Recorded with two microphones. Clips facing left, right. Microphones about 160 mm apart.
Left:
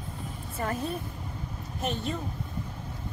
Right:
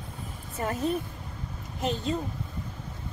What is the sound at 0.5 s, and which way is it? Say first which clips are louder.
Speech: right 2 dB; 20° right (ahead or behind).